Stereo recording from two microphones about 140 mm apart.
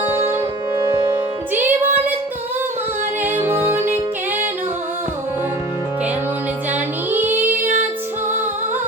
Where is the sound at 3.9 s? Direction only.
50° right (ahead or behind).